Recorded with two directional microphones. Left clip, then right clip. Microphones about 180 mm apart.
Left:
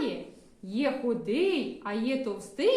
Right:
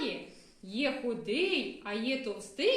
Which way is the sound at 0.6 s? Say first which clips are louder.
Left 3 dB; 20° left (ahead or behind).